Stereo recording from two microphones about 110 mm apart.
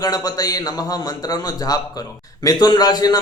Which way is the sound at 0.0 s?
35° left (ahead or behind).